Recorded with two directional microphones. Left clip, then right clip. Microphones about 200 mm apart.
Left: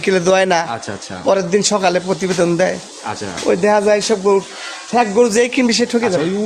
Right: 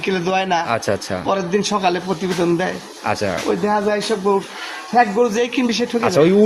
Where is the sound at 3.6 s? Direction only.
55° left (ahead or behind).